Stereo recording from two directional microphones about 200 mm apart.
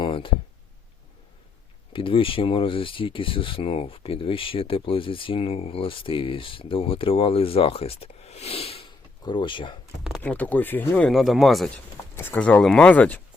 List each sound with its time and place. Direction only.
0.0 s a sound: 25° left (ahead or behind)
1.9 s speech: 25° left (ahead or behind)
10.0 s speech: 5° left (ahead or behind)